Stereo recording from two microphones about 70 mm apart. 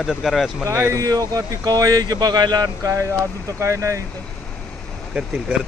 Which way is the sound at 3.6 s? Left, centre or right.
Right.